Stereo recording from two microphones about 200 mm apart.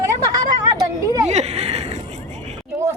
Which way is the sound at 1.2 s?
35° right (ahead or behind).